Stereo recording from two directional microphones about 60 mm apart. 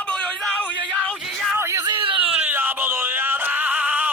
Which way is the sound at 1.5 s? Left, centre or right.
Right.